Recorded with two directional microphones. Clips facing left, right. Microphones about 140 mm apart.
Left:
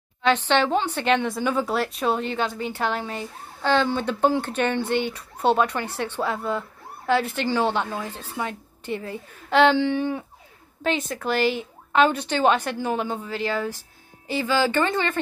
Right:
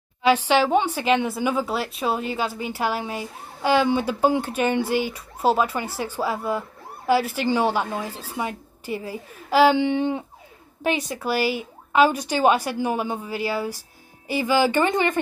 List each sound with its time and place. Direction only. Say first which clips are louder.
0.2 s speech: right 2 dB; 10° right (ahead or behind)
9.8 s speech: right 1 dB; 20° right (ahead or behind)